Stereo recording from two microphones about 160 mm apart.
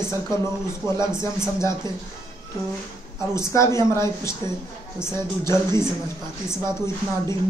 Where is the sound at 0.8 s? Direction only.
25° right (ahead or behind).